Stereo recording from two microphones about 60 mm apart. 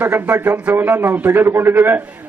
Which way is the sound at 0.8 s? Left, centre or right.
Right.